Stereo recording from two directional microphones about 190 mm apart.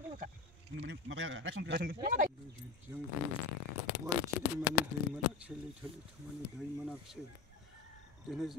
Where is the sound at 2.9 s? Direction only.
15° right (ahead or behind).